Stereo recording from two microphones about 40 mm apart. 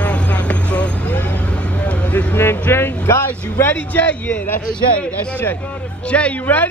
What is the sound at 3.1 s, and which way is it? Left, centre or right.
Speech, left.